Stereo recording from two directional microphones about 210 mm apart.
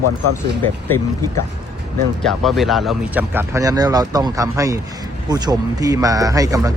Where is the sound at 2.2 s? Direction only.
Centre (ahead or behind).